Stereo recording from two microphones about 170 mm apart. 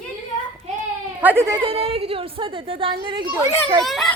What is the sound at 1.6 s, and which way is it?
A woman's voice, 35° right (ahead or behind).